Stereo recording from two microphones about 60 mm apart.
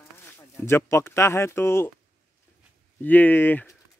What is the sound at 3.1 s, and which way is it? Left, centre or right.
Speech, left.